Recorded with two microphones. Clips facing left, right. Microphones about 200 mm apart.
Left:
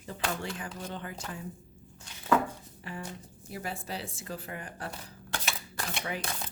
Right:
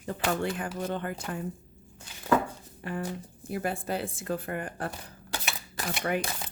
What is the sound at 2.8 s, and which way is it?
A woman's voice, 55° right (ahead or behind).